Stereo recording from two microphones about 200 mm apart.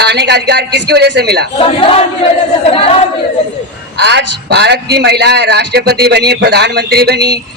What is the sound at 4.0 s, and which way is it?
A man's voice, 60° right (ahead or behind).